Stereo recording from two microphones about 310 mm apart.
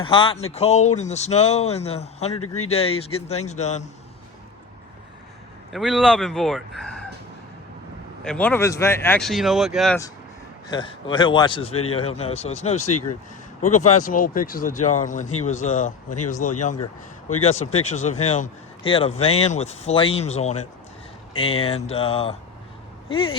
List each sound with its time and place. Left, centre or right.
0.0 s a man's voice: centre
2.3 s speech: left
2.6 s a man's voice: centre
5.7 s speech: centre
8.2 s speech: centre
10.7 s a man's voice: centre
12.9 s speech: left
13.6 s a man's voice: left